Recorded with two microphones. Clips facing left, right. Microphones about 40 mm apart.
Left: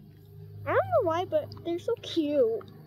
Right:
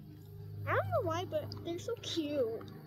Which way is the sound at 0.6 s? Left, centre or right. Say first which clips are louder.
Left 8 dB; centre.